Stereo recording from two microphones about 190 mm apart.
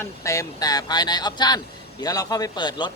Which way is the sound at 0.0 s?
15° left (ahead or behind).